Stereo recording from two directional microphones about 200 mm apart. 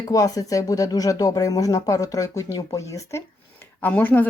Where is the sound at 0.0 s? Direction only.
20° left (ahead or behind).